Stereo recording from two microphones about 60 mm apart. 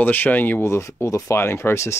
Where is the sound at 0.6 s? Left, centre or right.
Left.